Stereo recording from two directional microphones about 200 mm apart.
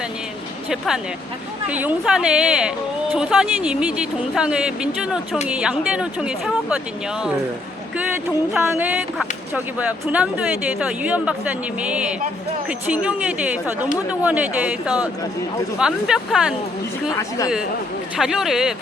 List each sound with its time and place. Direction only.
1.6 s speech: 10° right (ahead or behind)
8.5 s speech: 5° right (ahead or behind)
17.2 s speech: 15° left (ahead or behind)
18.2 s speech: centre (ahead or behind)